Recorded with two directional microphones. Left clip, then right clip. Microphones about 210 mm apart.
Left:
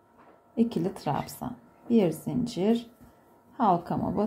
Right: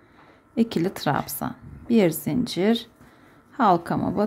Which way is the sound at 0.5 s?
15° right (ahead or behind).